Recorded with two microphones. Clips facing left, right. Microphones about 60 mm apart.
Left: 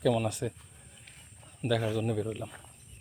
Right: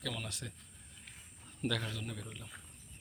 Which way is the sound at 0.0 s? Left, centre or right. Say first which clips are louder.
Left 15 dB; centre.